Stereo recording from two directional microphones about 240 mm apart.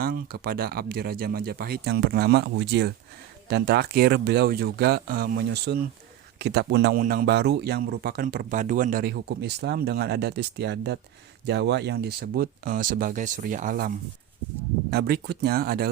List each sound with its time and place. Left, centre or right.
0.0 s speech: right